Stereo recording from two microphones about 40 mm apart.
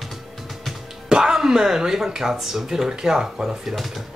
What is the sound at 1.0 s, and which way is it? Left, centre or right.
Speech, centre.